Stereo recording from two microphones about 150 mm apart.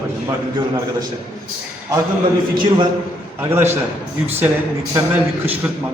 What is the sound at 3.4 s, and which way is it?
Speech, 15° right (ahead or behind).